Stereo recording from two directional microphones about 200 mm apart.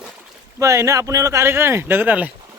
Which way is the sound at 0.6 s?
15° right (ahead or behind).